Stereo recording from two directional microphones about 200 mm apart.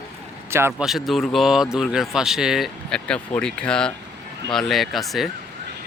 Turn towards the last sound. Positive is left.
turn(degrees=0)  # may be behind; listen again after turning